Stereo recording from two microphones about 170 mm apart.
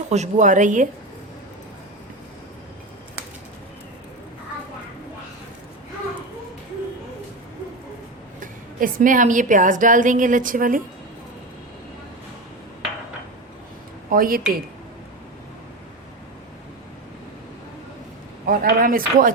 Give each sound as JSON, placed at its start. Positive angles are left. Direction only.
{"t": 0.1, "sound": "a woman's voice", "side_deg": -45}
{"t": 8.4, "sound": "a woman's voice", "side_deg": -50}
{"t": 14.1, "sound": "speech", "side_deg": -55}
{"t": 18.4, "sound": "speech", "side_deg": -60}